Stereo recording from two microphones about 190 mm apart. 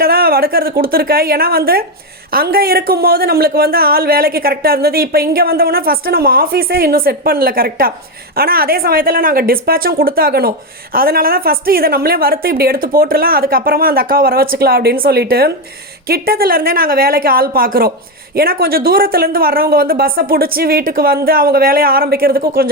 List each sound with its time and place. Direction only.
0.0 s a woman's voice: 50° right (ahead or behind)